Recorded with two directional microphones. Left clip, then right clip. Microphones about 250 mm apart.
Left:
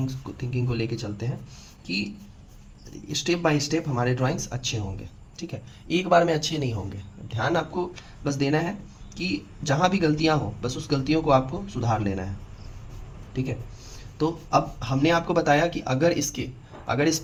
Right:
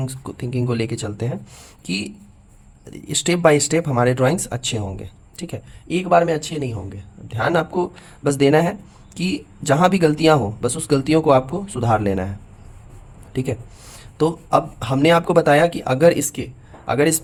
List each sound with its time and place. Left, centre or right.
0.0 s speech: right
2.9 s speech: right
5.9 s speech: right
13.3 s speech: right